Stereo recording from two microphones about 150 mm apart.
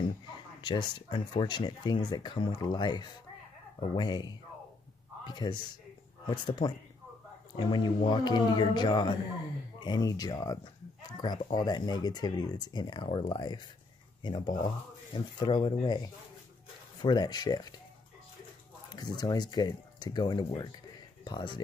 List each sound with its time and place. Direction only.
0.7 s a man's voice: 30° left (ahead or behind)
17.0 s speech: 30° left (ahead or behind)
18.9 s speech: 25° left (ahead or behind)